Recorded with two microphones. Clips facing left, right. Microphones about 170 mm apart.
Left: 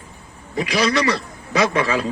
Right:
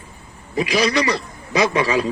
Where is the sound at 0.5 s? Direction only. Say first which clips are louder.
Right 1 dB; 15° right (ahead or behind).